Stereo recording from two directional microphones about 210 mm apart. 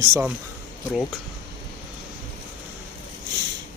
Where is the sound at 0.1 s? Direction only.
10° right (ahead or behind).